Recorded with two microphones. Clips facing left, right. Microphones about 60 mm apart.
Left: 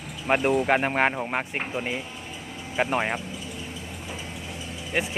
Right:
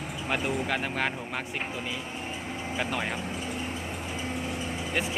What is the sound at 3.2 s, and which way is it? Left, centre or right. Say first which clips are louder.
Vehicle: right 3 dB; right.